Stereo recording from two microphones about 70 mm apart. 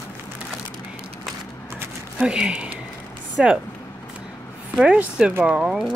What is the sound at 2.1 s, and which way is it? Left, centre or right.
Speech, centre.